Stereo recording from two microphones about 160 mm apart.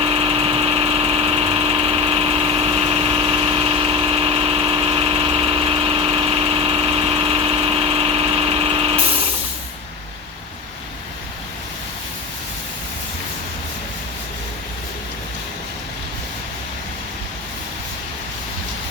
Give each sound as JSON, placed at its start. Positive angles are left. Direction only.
{"t": 0.0, "sound": "vehicle", "side_deg": -30}